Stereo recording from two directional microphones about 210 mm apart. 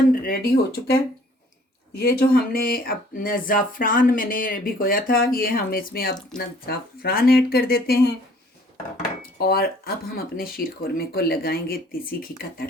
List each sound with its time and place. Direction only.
0.1 s speech: 45° left (ahead or behind)
9.4 s speech: 45° left (ahead or behind)